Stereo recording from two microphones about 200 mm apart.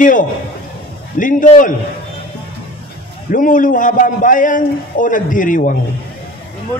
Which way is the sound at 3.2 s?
40° left (ahead or behind).